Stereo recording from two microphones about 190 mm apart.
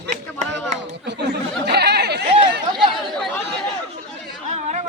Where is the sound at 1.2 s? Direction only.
60° right (ahead or behind).